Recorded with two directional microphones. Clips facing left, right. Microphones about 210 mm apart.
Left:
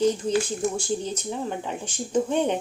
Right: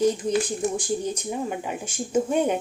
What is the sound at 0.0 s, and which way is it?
Speech, 10° right (ahead or behind).